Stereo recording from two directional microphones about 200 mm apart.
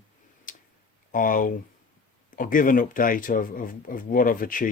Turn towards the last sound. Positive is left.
turn(degrees=45)  # may be behind; listen again after turning